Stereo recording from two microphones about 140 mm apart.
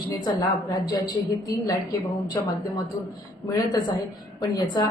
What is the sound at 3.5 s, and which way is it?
A woman's voice, 30° left (ahead or behind).